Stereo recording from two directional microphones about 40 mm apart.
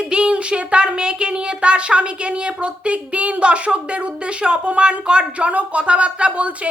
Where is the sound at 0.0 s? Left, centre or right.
Right.